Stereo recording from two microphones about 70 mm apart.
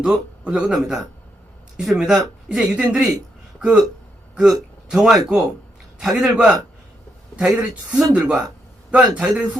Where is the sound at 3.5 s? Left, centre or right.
Centre.